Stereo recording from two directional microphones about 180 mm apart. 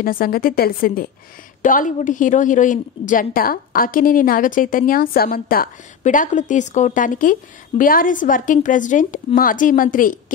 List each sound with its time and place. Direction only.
0.0 s a woman's voice: 55° left (ahead or behind)